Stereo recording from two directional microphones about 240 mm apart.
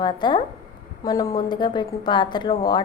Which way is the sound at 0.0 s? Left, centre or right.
Centre.